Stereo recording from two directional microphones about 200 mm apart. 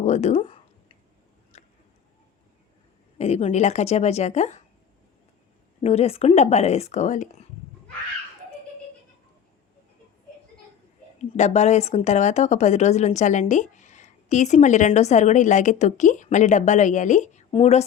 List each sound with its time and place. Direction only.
0.0 s a sound: 35° left (ahead or behind)
3.2 s speech: 35° left (ahead or behind)
5.8 s speech: 30° left (ahead or behind)
11.2 s speech: 35° left (ahead or behind)